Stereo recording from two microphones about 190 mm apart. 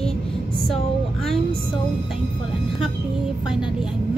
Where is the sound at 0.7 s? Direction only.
Centre (ahead or behind).